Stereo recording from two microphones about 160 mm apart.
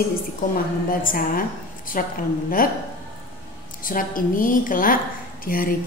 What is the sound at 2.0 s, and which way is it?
Speech, 55° left (ahead or behind).